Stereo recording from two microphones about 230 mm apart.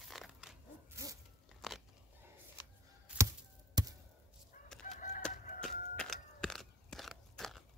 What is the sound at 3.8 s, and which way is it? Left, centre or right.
Chop, centre.